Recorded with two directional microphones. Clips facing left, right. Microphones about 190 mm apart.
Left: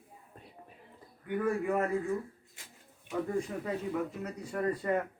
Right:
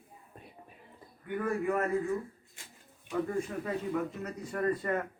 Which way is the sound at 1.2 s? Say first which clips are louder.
Left 1 dB; 15° left (ahead or behind).